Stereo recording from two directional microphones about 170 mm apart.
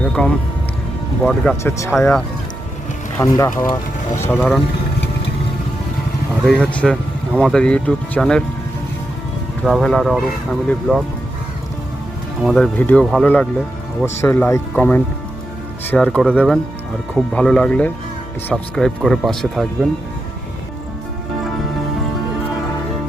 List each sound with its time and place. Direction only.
0.0 s music: 5° left (ahead or behind)
1.2 s speech: centre (ahead or behind)
3.2 s speech: 15° left (ahead or behind)
4.4 s speech: 5° left (ahead or behind)
6.4 s speech: 5° left (ahead or behind)
9.6 s speech: centre (ahead or behind)
12.4 s speech: centre (ahead or behind)